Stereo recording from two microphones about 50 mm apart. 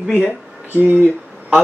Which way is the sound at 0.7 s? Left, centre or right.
Right.